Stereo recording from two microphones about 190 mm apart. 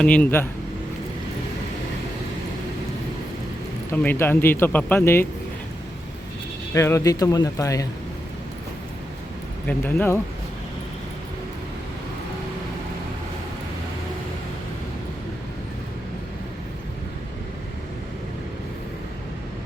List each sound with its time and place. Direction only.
0.0 s speech: 10° left (ahead or behind)
3.9 s speech: 10° left (ahead or behind)
6.7 s speech: 15° left (ahead or behind)
9.6 s speech: 10° left (ahead or behind)